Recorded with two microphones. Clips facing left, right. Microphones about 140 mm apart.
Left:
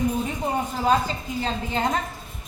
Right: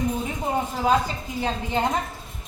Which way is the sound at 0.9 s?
10° right (ahead or behind).